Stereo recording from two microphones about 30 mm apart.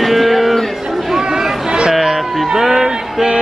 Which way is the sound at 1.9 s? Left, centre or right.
Centre.